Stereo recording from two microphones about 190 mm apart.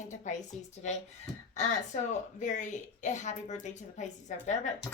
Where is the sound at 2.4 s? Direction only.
40° left (ahead or behind).